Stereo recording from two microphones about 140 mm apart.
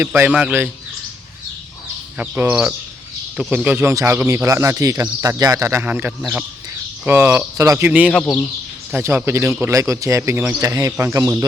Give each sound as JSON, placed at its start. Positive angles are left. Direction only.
{"t": 0.0, "sound": "speech", "side_deg": -15}
{"t": 2.1, "sound": "speech", "side_deg": -15}
{"t": 7.9, "sound": "speech", "side_deg": -10}